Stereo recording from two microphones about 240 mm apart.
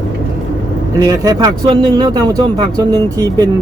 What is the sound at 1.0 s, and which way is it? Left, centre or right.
Speech, centre.